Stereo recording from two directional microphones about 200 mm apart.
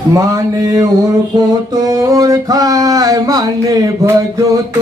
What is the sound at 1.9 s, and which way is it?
Music, 15° right (ahead or behind).